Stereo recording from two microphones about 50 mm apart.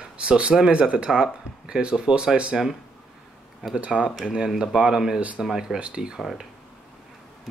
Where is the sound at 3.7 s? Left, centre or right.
Centre.